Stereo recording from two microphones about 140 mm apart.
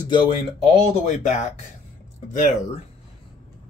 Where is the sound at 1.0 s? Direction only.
55° left (ahead or behind).